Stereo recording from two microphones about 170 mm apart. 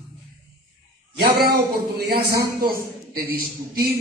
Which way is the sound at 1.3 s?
65° right (ahead or behind).